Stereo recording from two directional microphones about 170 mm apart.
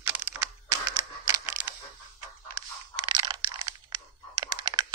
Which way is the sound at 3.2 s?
25° right (ahead or behind).